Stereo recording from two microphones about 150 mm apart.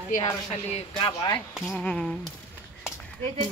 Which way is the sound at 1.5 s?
Centre (ahead or behind).